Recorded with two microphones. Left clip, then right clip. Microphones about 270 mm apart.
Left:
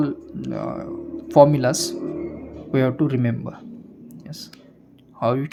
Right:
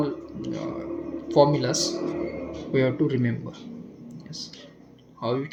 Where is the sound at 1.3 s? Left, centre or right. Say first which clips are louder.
Left 6 dB; left.